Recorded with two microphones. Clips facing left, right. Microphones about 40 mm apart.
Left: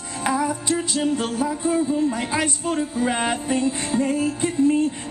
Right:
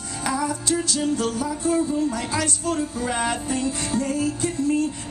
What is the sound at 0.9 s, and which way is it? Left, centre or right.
Speech, left.